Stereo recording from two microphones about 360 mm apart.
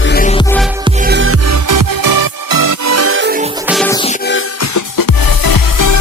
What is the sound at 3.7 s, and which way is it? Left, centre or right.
Music, centre.